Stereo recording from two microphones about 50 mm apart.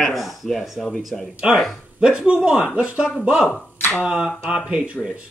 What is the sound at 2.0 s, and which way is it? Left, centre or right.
Speech, centre.